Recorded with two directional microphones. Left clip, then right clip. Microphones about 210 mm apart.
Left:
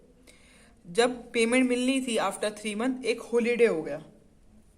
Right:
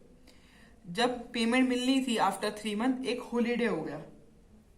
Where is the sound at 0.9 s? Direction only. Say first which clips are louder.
Left 5 dB; 30° left (ahead or behind).